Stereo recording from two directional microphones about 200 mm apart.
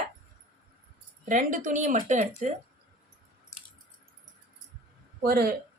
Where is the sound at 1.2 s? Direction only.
40° right (ahead or behind).